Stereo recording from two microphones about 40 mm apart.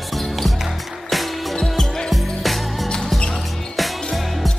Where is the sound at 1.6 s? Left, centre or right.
Centre.